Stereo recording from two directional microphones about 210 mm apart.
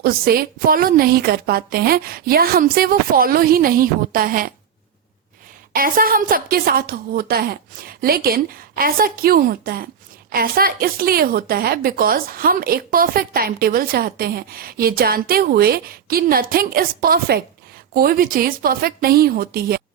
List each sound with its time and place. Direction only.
0.0 s a woman's voice: 45° right (ahead or behind)
5.7 s a woman's voice: 45° right (ahead or behind)